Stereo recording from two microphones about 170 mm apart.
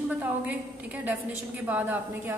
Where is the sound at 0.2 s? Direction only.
10° right (ahead or behind).